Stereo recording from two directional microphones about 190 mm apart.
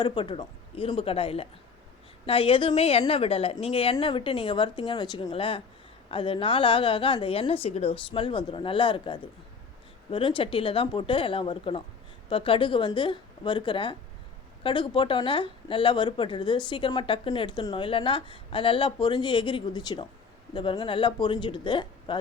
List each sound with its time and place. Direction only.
0.0 s speech: 25° left (ahead or behind)